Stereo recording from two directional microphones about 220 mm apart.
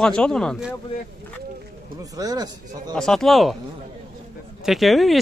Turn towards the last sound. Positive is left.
turn(degrees=0)  # may be behind; listen again after turning